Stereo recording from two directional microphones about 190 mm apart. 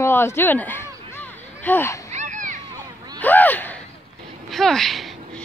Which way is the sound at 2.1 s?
40° right (ahead or behind).